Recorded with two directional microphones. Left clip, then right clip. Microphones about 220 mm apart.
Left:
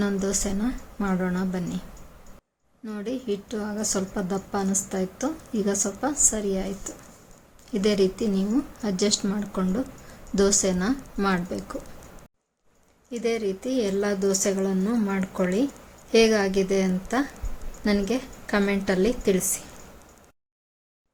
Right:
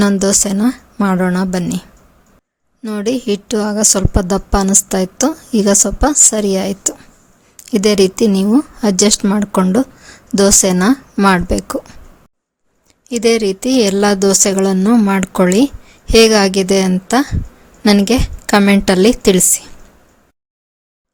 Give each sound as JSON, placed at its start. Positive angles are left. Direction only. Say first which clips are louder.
{"t": 0.0, "sound": "a woman's voice", "louder": "right 13 dB", "side_deg": -45}
{"t": 2.8, "sound": "a woman's voice", "louder": "right 13 dB", "side_deg": -45}
{"t": 13.1, "sound": "a woman's voice", "louder": "right 13 dB", "side_deg": -45}